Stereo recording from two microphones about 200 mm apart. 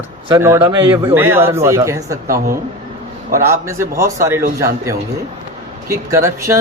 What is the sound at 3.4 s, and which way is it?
Speech, 15° right (ahead or behind).